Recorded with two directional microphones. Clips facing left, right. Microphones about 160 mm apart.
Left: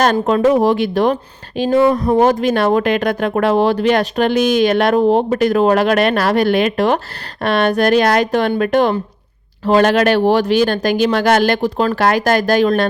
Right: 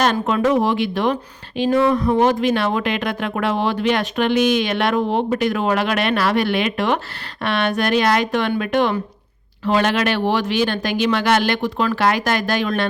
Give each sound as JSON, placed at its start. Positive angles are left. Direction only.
{"t": 0.0, "sound": "speech", "side_deg": 40}